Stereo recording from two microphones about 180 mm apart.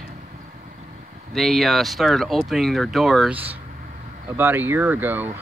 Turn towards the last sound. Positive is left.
turn(degrees=-10)  # may be behind; listen again after turning